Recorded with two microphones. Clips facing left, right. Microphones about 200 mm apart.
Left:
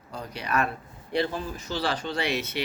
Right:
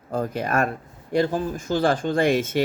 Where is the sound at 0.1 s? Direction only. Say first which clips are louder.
Right 7 dB; 50° right (ahead or behind).